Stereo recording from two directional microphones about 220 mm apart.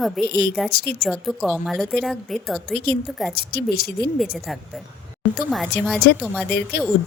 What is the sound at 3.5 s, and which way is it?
Speech, 45° left (ahead or behind).